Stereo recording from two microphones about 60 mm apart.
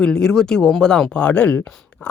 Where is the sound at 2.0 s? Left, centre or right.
Left.